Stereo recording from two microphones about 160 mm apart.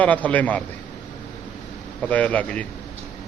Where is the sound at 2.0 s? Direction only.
10° left (ahead or behind).